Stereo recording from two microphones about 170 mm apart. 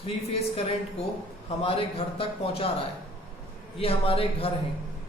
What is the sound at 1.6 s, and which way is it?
Speech, 35° left (ahead or behind).